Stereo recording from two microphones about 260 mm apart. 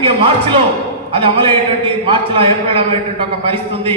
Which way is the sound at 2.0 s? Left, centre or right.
Right.